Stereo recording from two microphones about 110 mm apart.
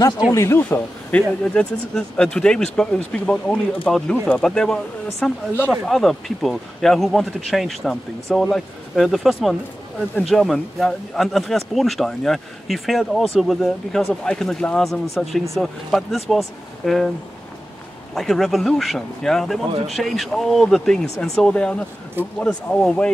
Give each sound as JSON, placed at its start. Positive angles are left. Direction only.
{"t": 0.3, "sound": "speech", "side_deg": 25}
{"t": 0.7, "sound": "speech", "side_deg": 15}
{"t": 18.1, "sound": "speech", "side_deg": 0}